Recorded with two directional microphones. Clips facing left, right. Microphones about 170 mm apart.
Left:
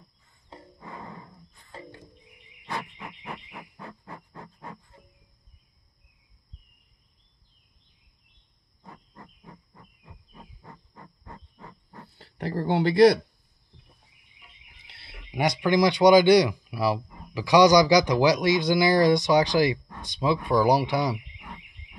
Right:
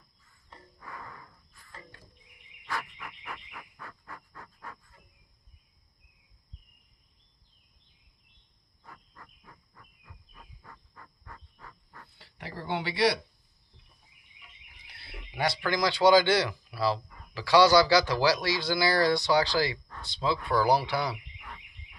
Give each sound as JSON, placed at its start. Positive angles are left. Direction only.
{"t": 0.3, "sound": "music", "side_deg": 20}
{"t": 2.6, "sound": "frog", "side_deg": 20}
{"t": 3.5, "sound": "a sound", "side_deg": 20}
{"t": 8.8, "sound": "a sound", "side_deg": 20}
{"t": 12.2, "sound": "speech", "side_deg": 45}
{"t": 14.9, "sound": "speech", "side_deg": 20}